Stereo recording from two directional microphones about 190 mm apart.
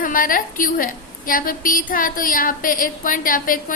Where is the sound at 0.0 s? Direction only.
45° left (ahead or behind).